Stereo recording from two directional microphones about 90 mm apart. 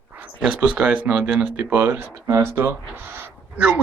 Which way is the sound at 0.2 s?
15° right (ahead or behind).